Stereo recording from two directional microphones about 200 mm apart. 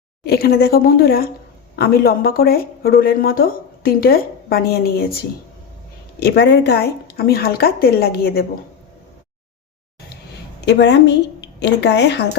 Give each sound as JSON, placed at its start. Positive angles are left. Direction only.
{"t": 0.3, "sound": "speech", "side_deg": 50}
{"t": 10.6, "sound": "a woman's voice", "side_deg": 55}